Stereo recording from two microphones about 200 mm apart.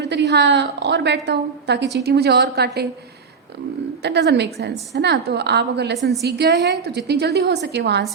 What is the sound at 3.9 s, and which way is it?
A woman's voice, 55° right (ahead or behind).